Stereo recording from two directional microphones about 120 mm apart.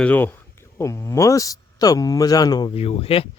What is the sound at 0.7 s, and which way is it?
Speech, 25° left (ahead or behind).